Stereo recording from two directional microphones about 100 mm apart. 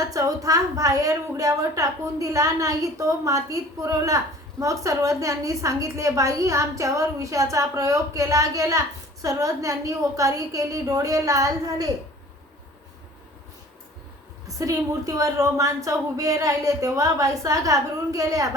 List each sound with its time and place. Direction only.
0.0 s a sound: 35° right (ahead or behind)
0.4 s a woman's voice: 35° right (ahead or behind)
14.6 s a woman's voice: 35° right (ahead or behind)